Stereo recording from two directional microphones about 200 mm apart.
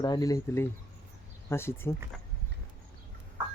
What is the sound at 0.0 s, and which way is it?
Speech, 20° left (ahead or behind).